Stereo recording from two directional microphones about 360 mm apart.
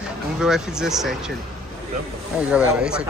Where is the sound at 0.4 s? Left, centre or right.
Centre.